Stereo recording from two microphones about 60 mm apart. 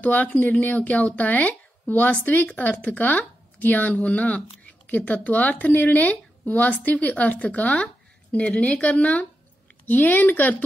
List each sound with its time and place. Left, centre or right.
0.0 s a woman's voice: left